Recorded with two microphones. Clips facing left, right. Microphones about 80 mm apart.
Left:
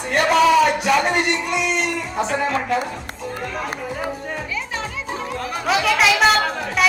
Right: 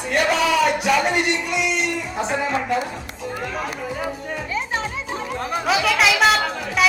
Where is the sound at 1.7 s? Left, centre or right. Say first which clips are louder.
Left 1 dB; centre.